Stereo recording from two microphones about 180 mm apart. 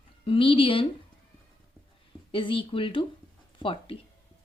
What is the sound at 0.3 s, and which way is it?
Speech, 30° left (ahead or behind).